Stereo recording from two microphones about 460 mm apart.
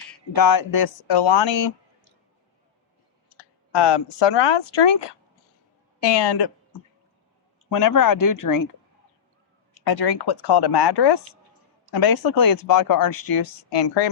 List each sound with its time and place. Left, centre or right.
0.3 s speech: left
3.3 s speech: left
7.7 s speech: left
9.8 s speech: left